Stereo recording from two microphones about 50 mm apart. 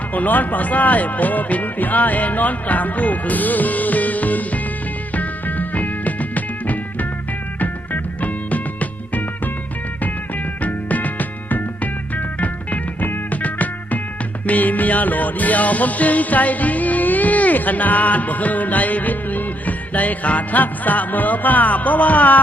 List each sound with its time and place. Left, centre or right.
0.1 s music: left